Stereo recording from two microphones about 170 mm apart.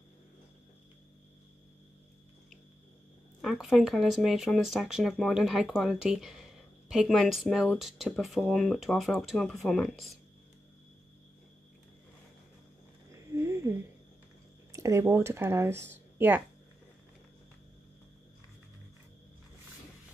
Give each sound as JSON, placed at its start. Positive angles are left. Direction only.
{"t": 3.3, "sound": "speech", "side_deg": 0}
{"t": 13.5, "sound": "a sound", "side_deg": -15}
{"t": 14.7, "sound": "speech", "side_deg": -20}